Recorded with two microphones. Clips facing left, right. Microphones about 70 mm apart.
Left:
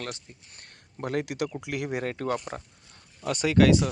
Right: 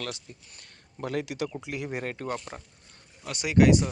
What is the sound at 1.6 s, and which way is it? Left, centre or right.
Speech, left.